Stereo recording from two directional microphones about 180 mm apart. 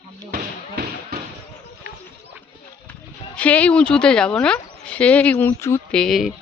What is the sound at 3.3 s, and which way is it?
Speech, 5° left (ahead or behind).